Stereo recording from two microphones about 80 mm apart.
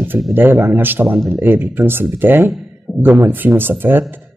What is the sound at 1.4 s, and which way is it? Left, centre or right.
Speech, right.